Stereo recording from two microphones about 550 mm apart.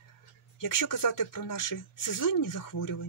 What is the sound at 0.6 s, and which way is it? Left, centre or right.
Speech, left.